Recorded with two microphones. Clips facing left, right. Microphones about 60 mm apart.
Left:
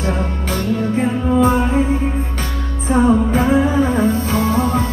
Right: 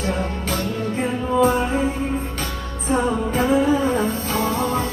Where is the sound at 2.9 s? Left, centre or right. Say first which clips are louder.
Left 6 dB; left.